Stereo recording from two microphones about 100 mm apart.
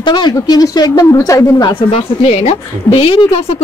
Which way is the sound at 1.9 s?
90° left.